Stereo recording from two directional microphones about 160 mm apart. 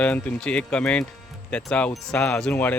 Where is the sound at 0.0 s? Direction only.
10° left (ahead or behind).